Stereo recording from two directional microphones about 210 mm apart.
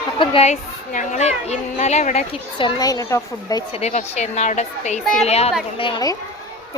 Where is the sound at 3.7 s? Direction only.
30° left (ahead or behind).